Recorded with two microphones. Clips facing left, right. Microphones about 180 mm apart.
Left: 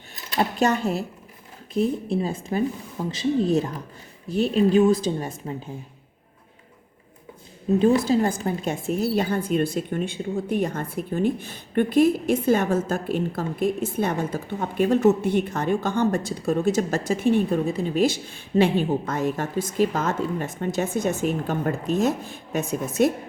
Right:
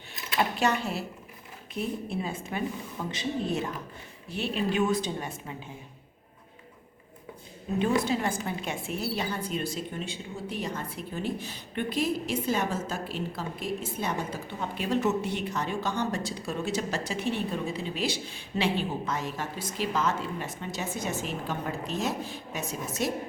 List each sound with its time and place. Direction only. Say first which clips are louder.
0.3 s a woman's voice: left 5 dB; 45° left (ahead or behind)
7.8 s a woman's voice: left 7 dB; 35° left (ahead or behind); by 23.1 s 50° left (ahead or behind)